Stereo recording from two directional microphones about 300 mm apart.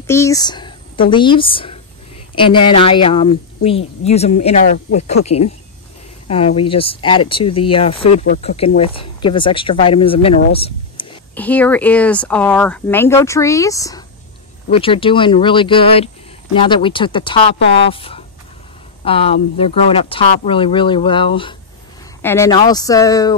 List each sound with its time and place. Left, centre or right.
0.0 s speech: centre
2.5 s speech: left
2.8 s speech: centre
6.2 s speech: centre
10.5 s a sound: centre
11.3 s speech: centre